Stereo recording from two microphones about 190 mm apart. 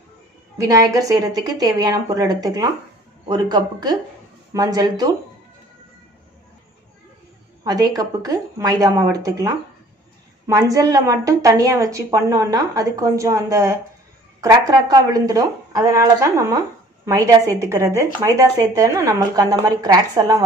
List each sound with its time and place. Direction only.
0.6 s speech: 20° right (ahead or behind)
7.6 s a woman's voice: 20° right (ahead or behind)